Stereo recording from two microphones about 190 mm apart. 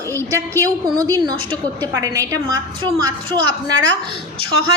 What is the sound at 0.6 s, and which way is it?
A woman's voice, 20° right (ahead or behind).